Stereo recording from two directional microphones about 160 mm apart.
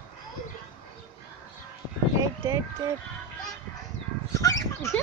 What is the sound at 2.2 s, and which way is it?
Speech, 20° right (ahead or behind).